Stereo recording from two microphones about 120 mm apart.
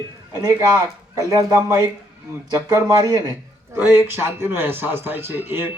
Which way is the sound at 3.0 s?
30° right (ahead or behind).